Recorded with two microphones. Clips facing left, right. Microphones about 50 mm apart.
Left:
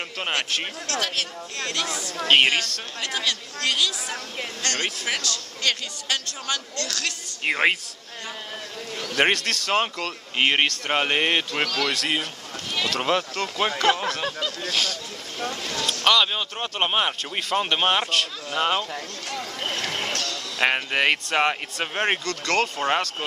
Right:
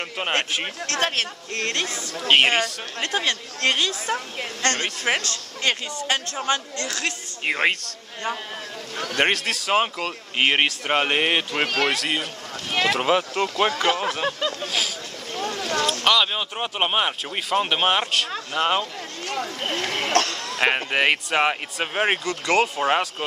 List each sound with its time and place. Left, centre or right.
0.2 s speech: centre
0.8 s speech: right
2.2 s speech: centre
3.0 s speech: right
7.4 s speech: centre
9.1 s speech: centre
11.6 s speech: right
11.9 s speech: centre
14.7 s speech: centre
16.0 s speech: centre
19.2 s boat: right
19.7 s speech: right
20.1 s a sound: right
20.6 s speech: centre